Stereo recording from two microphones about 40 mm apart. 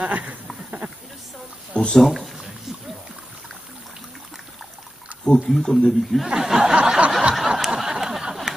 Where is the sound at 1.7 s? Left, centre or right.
Left.